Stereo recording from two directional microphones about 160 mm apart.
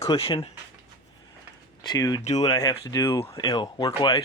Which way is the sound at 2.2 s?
45° left (ahead or behind).